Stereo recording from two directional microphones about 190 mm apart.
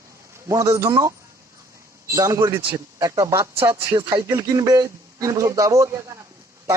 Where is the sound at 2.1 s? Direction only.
15° right (ahead or behind).